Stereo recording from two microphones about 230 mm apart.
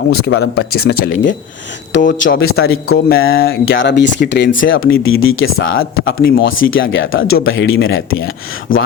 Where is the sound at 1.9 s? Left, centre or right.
Left.